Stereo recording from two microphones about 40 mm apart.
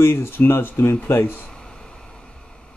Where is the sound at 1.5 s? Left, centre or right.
Centre.